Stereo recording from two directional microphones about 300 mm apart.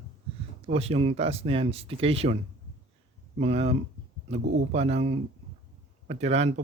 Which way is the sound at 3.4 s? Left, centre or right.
Right.